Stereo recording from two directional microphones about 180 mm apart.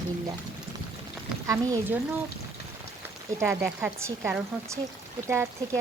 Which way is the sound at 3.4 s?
15° right (ahead or behind).